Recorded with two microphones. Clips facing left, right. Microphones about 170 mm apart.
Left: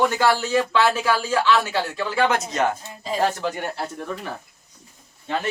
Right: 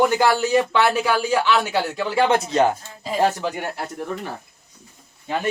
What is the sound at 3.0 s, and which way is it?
Speech, 5° right (ahead or behind).